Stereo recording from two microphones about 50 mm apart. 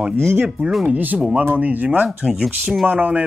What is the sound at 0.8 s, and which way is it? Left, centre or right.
Speech, right.